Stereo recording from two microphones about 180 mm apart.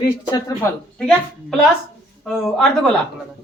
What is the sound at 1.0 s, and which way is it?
Speech, 5° left (ahead or behind).